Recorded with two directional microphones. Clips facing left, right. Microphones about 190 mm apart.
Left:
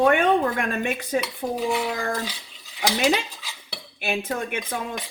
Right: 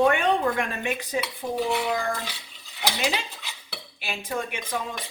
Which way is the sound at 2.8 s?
50° left (ahead or behind).